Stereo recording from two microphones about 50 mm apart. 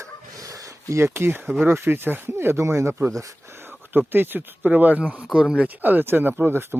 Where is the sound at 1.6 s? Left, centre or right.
Right.